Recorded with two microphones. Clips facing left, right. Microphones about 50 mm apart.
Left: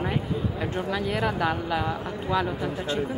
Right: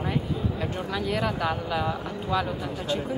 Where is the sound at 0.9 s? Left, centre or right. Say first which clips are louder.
Even; left.